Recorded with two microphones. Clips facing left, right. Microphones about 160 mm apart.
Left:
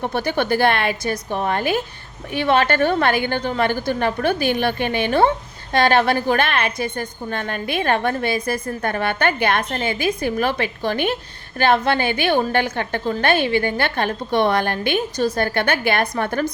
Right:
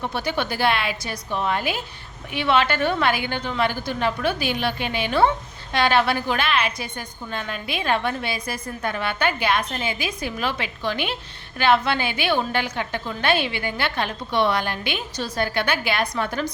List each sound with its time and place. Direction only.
0.0 s a woman's voice: 50° left (ahead or behind)